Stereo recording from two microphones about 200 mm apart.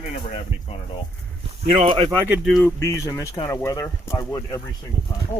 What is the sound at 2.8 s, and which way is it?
Speech, 10° left (ahead or behind).